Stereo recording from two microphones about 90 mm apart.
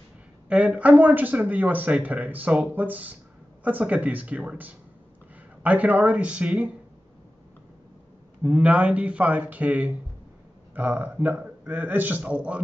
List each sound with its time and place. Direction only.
0.5 s speech: 15° right (ahead or behind)
8.4 s speech: 10° right (ahead or behind)